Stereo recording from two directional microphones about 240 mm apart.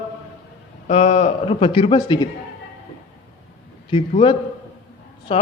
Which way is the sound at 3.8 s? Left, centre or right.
Left.